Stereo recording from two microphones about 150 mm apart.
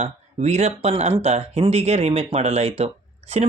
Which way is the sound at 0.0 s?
50° right (ahead or behind).